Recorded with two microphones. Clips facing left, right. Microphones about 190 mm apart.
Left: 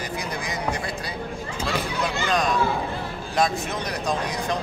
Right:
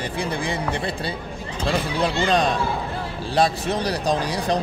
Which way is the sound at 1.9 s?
30° right (ahead or behind).